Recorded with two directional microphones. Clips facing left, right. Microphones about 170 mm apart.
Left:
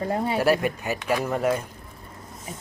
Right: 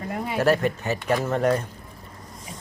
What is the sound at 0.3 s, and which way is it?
Speech, 10° left (ahead or behind).